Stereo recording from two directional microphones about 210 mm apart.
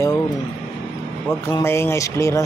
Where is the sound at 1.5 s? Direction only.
10° left (ahead or behind).